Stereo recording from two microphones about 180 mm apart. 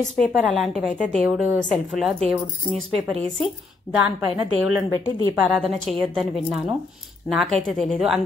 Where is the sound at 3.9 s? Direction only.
30° left (ahead or behind).